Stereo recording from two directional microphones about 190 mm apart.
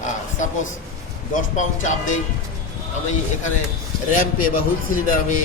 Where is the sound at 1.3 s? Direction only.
40° left (ahead or behind).